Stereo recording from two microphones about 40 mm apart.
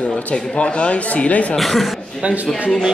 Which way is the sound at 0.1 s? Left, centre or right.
Left.